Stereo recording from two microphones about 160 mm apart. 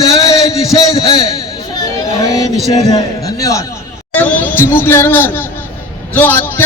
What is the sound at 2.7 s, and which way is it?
A man's voice, 25° left (ahead or behind).